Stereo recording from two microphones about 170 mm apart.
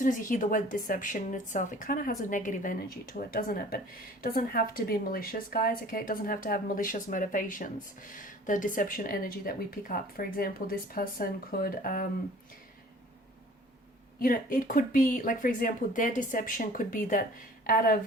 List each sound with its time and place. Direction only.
0.0 s a woman's voice: 50° left (ahead or behind)
14.2 s a woman's voice: 55° left (ahead or behind)